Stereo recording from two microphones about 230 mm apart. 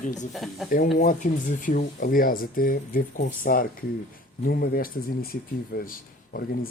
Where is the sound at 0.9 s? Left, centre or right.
Left.